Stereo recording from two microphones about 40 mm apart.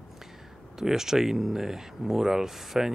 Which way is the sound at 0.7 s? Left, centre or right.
Centre.